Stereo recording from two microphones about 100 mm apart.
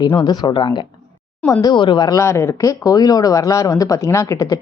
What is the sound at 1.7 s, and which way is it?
Speech, 50° left (ahead or behind).